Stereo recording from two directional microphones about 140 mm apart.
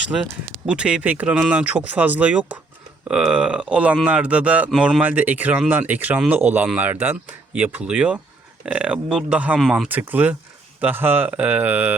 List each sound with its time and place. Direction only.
0.2 s speech: 5° right (ahead or behind)